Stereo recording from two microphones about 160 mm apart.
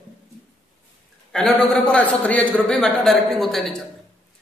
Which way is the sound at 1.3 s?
5° left (ahead or behind).